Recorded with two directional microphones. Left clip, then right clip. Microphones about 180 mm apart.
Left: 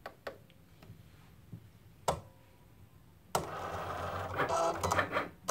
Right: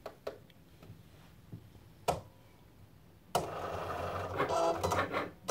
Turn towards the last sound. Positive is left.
turn(degrees=30)  # may be behind; listen again after turning